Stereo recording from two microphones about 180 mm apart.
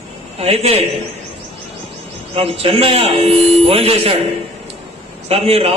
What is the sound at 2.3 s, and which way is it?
A man's voice, 35° right (ahead or behind).